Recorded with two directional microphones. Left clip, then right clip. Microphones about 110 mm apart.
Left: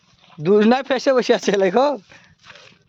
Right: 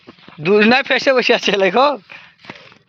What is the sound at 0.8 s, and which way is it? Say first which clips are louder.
Speech: right 3 dB; 45° left (ahead or behind).